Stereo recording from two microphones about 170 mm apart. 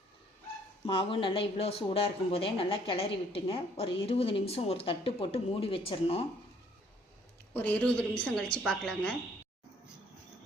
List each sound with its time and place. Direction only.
0.9 s speech: 30° left (ahead or behind)
7.5 s a woman's voice: 10° left (ahead or behind)